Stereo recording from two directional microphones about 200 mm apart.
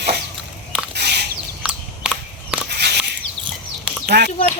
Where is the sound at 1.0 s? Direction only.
55° right (ahead or behind).